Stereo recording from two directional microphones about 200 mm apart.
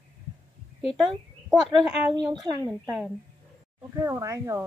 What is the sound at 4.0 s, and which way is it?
Speech, 15° right (ahead or behind).